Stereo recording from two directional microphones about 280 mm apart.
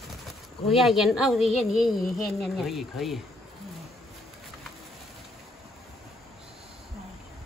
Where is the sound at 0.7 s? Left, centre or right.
Centre.